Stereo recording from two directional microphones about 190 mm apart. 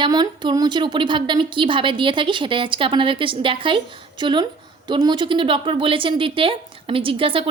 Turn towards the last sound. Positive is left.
turn(degrees=-30)  # may be behind; listen again after turning